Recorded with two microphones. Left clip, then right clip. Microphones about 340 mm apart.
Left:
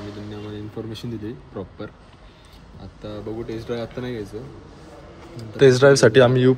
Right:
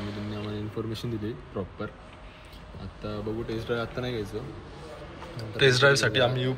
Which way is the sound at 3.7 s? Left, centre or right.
Centre.